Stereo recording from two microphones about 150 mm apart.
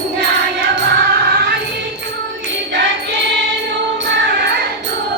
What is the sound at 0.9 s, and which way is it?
Music, 90° right.